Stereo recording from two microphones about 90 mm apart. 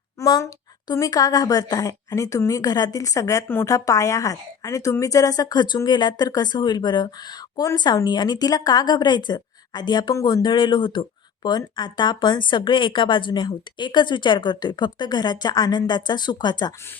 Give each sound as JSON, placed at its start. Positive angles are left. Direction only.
{"t": 0.2, "sound": "a sound", "side_deg": 40}
{"t": 0.9, "sound": "a woman's voice", "side_deg": 40}
{"t": 11.4, "sound": "speech", "side_deg": 50}